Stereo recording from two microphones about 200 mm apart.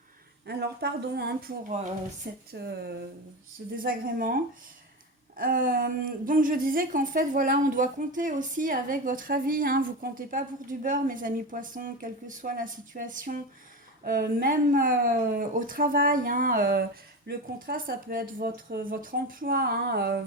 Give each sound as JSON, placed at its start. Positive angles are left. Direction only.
{"t": 0.4, "sound": "speech", "side_deg": -55}
{"t": 5.4, "sound": "speech", "side_deg": -45}